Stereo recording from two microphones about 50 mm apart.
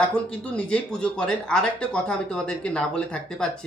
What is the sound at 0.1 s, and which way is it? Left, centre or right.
Speech, left.